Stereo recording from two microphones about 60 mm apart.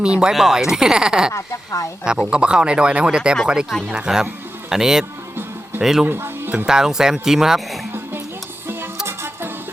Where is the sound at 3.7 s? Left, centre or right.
Centre.